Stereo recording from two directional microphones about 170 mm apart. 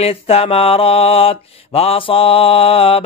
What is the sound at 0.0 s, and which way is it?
Mantra, 35° left (ahead or behind).